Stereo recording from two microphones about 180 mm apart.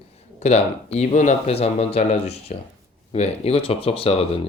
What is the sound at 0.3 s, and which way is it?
Speech, 35° left (ahead or behind).